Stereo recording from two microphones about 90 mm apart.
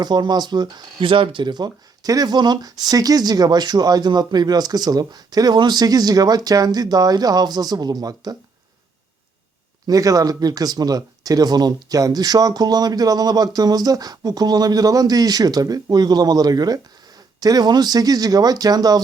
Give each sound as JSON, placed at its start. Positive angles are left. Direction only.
{"t": 0.0, "sound": "speech", "side_deg": -50}
{"t": 9.8, "sound": "speech", "side_deg": -40}